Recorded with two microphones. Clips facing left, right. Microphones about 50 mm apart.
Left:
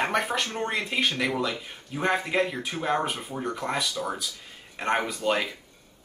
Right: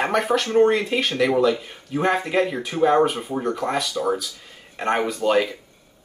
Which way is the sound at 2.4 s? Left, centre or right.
Centre.